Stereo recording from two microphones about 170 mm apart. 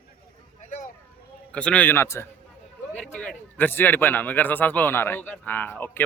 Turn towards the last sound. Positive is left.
turn(degrees=10)  # may be behind; listen again after turning